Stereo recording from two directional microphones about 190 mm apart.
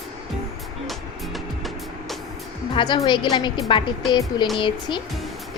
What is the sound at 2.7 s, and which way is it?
A woman's voice, 25° left (ahead or behind).